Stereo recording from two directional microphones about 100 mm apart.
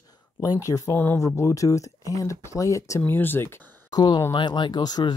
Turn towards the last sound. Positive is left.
turn(degrees=45)  # may be behind; listen again after turning